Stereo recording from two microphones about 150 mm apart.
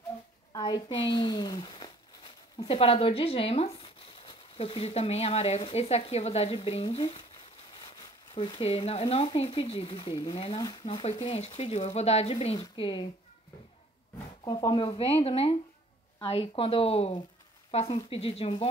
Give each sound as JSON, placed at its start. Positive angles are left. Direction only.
{"t": 0.5, "sound": "a sound", "side_deg": 25}
{"t": 0.8, "sound": "speech", "side_deg": 35}
{"t": 8.4, "sound": "speech", "side_deg": 40}
{"t": 10.6, "sound": "speech", "side_deg": 30}
{"t": 14.4, "sound": "speech", "side_deg": 25}
{"t": 14.7, "sound": "speech", "side_deg": 40}